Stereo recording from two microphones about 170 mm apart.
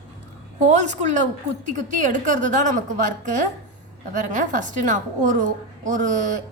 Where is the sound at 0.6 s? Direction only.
45° right (ahead or behind).